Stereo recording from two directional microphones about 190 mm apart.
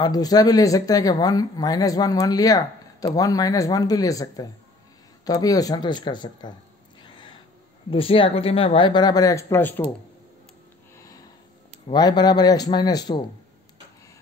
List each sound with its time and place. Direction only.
0.0 s speech: 20° left (ahead or behind)
7.0 s a sound: 25° left (ahead or behind)
7.9 s speech: 30° left (ahead or behind); by 9.8 s 10° left (ahead or behind)
11.0 s sniff: 15° left (ahead or behind)
11.9 s speech: 20° left (ahead or behind)